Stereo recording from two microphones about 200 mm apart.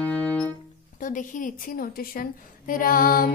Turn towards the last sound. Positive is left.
turn(degrees=45)  # may be behind; listen again after turning